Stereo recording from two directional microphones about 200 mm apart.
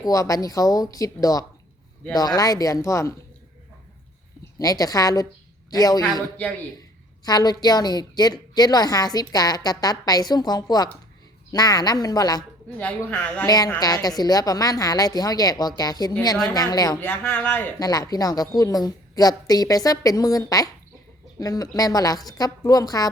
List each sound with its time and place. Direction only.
0.0 s speech: 15° left (ahead or behind)
4.5 s a woman's voice: 20° left (ahead or behind)
7.3 s a woman's voice: 20° left (ahead or behind)
12.7 s speech: 10° left (ahead or behind)
13.5 s a woman's voice: 20° left (ahead or behind)